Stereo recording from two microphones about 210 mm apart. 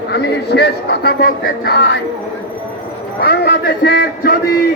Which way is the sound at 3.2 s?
50° left (ahead or behind).